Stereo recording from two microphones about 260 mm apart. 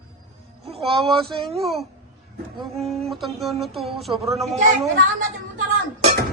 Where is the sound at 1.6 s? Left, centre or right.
Centre.